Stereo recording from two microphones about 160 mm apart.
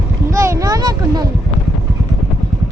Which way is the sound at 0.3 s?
20° right (ahead or behind).